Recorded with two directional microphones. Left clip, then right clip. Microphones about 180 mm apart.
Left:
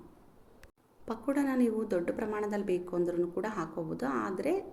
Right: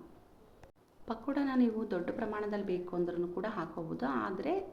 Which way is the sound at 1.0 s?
10° left (ahead or behind).